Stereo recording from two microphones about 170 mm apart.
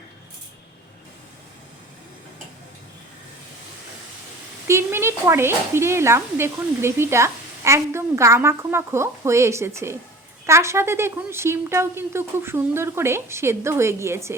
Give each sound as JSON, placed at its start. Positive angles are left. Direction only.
{"t": 4.7, "sound": "speech", "side_deg": -15}